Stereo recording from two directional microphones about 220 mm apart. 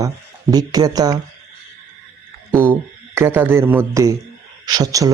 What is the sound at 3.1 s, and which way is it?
Speech, 10° right (ahead or behind).